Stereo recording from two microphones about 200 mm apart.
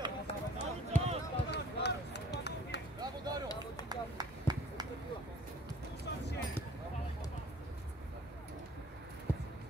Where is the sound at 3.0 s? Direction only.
20° right (ahead or behind).